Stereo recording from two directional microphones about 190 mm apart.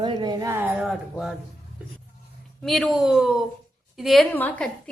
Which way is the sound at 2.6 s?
Centre (ahead or behind).